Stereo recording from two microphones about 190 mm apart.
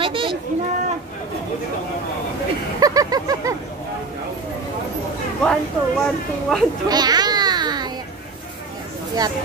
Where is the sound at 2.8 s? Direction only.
20° right (ahead or behind).